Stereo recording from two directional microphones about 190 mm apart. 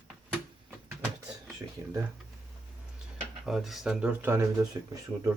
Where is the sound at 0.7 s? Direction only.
5° right (ahead or behind).